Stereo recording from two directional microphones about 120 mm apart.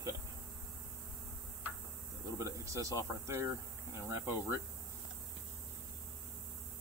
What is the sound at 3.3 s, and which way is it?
Speech, 25° right (ahead or behind).